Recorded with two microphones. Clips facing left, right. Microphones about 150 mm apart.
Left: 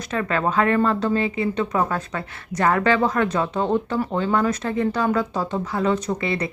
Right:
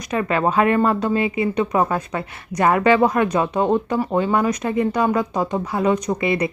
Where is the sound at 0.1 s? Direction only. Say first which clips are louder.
Right 3 dB; 15° right (ahead or behind).